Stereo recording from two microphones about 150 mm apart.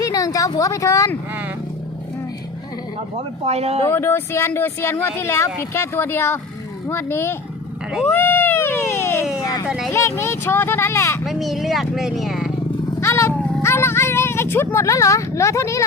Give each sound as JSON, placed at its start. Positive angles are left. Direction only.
{"t": 0.0, "sound": "a woman's voice", "side_deg": 25}
{"t": 3.4, "sound": "speech", "side_deg": -45}
{"t": 3.8, "sound": "speech", "side_deg": 15}
{"t": 8.0, "sound": "a sound", "side_deg": 15}
{"t": 9.6, "sound": "speech", "side_deg": -5}
{"t": 9.9, "sound": "speech", "side_deg": 20}
{"t": 11.3, "sound": "speech", "side_deg": 0}
{"t": 13.0, "sound": "roaring cats", "side_deg": 20}
{"t": 13.6, "sound": "speech", "side_deg": 15}